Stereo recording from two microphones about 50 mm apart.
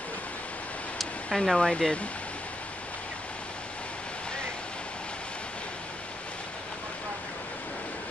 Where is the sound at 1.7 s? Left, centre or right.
Centre.